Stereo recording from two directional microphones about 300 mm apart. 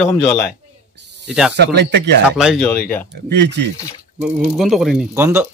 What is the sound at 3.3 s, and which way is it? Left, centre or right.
Speech, right.